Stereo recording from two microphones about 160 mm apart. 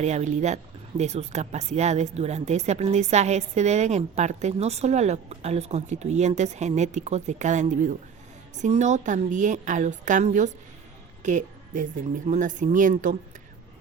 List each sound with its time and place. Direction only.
0.0 s speech: 45° right (ahead or behind)